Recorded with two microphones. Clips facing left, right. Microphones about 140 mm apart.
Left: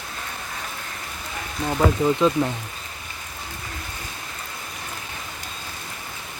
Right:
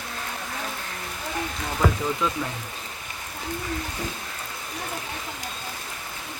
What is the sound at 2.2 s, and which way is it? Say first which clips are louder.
Speech: left 8 dB; 25° left (ahead or behind).